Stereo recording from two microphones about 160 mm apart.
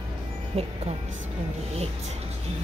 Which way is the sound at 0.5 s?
40° right (ahead or behind).